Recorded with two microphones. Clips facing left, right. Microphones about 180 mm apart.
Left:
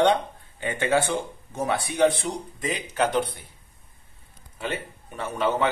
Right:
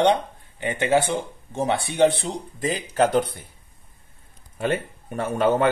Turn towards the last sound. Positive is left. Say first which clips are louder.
# right 4 dB
turn(degrees=-50)  # may be behind; listen again after turning